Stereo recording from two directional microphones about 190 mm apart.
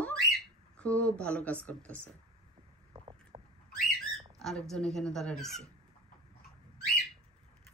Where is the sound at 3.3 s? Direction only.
30° right (ahead or behind).